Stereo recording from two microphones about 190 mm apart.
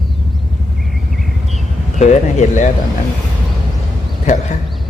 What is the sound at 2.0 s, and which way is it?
Speech, 40° left (ahead or behind).